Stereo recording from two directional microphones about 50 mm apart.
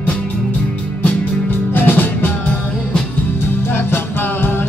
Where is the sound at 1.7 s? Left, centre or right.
Left.